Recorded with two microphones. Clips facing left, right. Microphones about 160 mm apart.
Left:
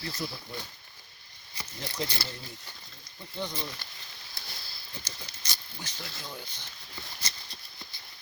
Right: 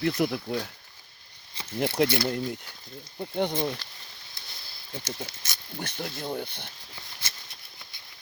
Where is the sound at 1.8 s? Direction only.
65° right (ahead or behind).